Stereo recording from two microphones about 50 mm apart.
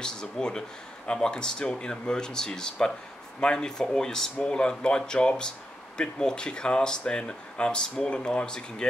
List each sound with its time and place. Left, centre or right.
0.0 s speech: centre